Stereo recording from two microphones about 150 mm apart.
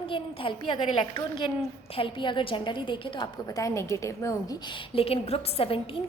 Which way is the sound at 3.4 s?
20° left (ahead or behind).